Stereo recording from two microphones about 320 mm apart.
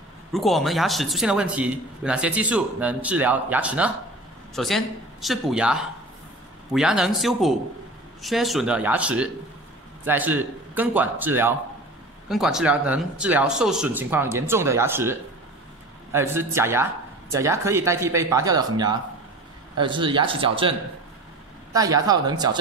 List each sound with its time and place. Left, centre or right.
0.3 s speech: centre
21.7 s speech: centre